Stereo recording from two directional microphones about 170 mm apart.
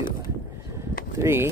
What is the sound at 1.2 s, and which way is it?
Speech, 15° right (ahead or behind).